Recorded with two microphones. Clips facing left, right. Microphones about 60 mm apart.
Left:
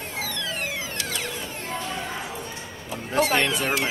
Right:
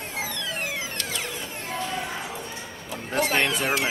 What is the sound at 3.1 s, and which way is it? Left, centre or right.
Speech, centre.